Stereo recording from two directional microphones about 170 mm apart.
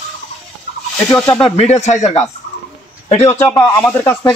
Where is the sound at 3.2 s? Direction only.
15° left (ahead or behind).